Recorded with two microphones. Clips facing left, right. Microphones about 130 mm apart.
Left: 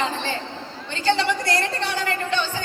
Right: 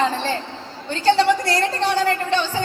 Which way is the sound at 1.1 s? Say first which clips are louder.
Right 5 dB; 35° right (ahead or behind).